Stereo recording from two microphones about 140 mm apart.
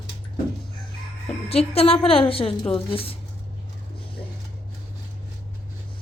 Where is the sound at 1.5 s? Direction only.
45° left (ahead or behind).